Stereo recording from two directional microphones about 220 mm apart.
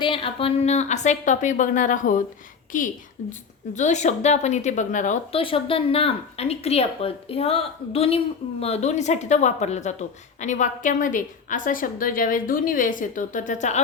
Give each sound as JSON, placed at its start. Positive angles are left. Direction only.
{"t": 0.0, "sound": "a woman's voice", "side_deg": 25}